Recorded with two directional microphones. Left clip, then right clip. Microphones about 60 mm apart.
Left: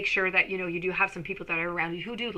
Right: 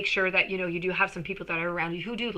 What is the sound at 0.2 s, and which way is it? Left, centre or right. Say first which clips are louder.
A woman's voice: even; left.